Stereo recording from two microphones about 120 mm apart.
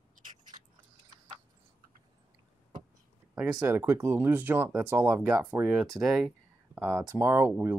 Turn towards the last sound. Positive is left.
turn(degrees=-20)  # may be behind; listen again after turning